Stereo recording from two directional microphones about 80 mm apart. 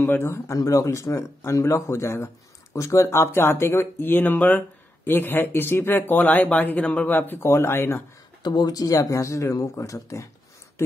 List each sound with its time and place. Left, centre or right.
0.0 s speech: left
0.6 s speech: left
8.4 s speech: left